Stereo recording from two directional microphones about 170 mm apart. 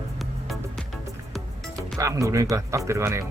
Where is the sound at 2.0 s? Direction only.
20° right (ahead or behind).